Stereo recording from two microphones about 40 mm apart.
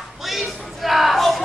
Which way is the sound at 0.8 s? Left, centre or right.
Centre.